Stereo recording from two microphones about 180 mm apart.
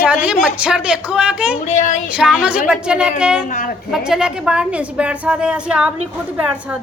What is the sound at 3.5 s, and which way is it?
Speech, 45° left (ahead or behind).